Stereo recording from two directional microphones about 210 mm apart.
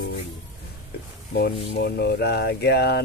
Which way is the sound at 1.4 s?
55° left (ahead or behind).